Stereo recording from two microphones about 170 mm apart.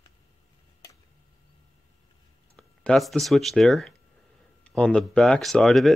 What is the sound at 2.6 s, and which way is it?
Speech, centre (ahead or behind).